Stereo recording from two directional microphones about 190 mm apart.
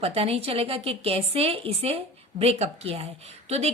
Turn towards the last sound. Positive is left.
turn(degrees=-35)  # may be behind; listen again after turning